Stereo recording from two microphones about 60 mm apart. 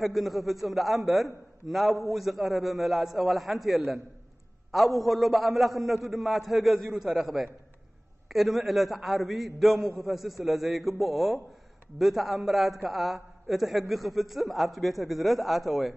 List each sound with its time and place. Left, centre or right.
0.0 s a man's voice: centre
8.3 s a man's voice: centre